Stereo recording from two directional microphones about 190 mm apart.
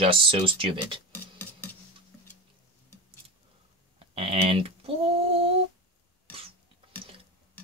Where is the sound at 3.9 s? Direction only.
30° right (ahead or behind).